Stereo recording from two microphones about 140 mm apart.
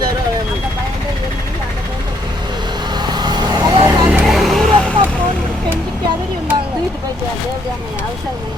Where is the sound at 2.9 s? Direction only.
30° right (ahead or behind).